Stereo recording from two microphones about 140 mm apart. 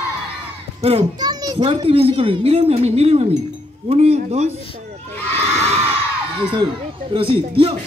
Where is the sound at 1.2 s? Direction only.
30° right (ahead or behind); by 4.6 s 50° right (ahead or behind).